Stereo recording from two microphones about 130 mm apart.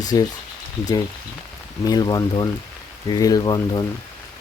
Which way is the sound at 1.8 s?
30° left (ahead or behind).